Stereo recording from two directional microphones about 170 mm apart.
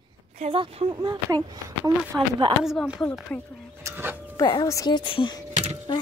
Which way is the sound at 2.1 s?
10° right (ahead or behind).